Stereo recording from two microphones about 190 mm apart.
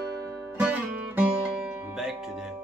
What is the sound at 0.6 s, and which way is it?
Music, 10° right (ahead or behind).